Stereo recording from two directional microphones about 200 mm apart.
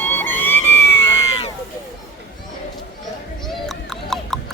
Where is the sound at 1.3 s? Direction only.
30° left (ahead or behind).